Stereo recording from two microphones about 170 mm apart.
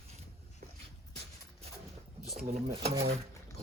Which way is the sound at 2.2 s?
Centre (ahead or behind).